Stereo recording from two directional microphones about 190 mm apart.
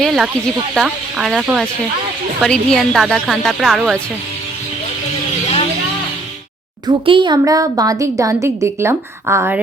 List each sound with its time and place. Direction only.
0.0 s a woman's voice: centre (ahead or behind)
6.8 s a woman's voice: 25° right (ahead or behind)